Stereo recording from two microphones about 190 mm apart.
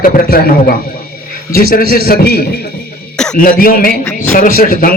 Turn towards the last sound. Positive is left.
turn(degrees=45)  # may be behind; listen again after turning